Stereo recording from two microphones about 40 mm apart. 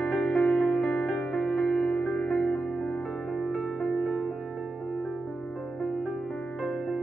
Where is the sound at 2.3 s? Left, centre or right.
Centre.